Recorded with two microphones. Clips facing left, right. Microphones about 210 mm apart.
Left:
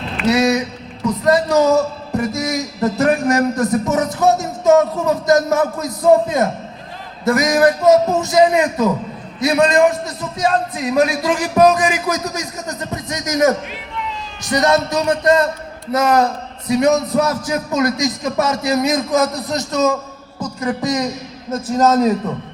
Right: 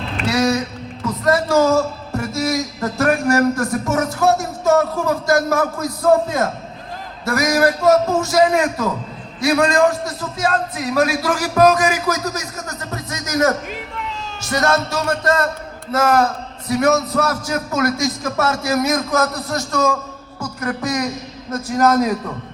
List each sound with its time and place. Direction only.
0.3 s a man's voice: 20° left (ahead or behind)
13.7 s a sound: 45° right (ahead or behind)
14.5 s a man's voice: 20° left (ahead or behind)